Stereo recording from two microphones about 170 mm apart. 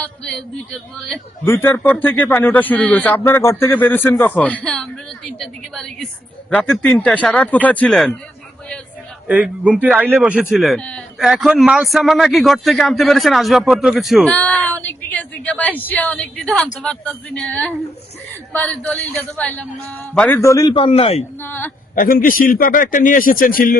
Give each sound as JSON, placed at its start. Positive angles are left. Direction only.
{"t": 0.0, "sound": "speech", "side_deg": 5}
{"t": 1.5, "sound": "speech", "side_deg": 15}
{"t": 9.2, "sound": "speech", "side_deg": -10}
{"t": 21.4, "sound": "speech", "side_deg": 10}
{"t": 21.9, "sound": "a man's voice", "side_deg": 55}